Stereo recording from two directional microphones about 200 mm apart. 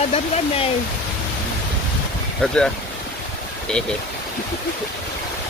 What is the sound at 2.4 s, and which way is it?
Speech, centre (ahead or behind).